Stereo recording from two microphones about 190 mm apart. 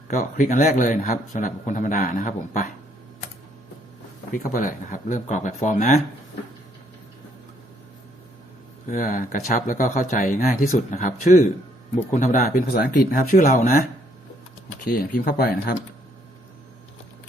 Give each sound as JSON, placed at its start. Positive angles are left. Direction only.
{"t": 0.1, "sound": "speech", "side_deg": 40}
{"t": 4.3, "sound": "speech", "side_deg": 45}
{"t": 8.9, "sound": "speech", "side_deg": 45}
{"t": 14.8, "sound": "speech", "side_deg": 50}